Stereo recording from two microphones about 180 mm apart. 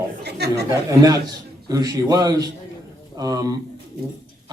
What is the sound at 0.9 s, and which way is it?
A man's voice, 20° right (ahead or behind).